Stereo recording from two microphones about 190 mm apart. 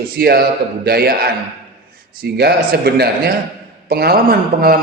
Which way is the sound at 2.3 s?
55° right (ahead or behind).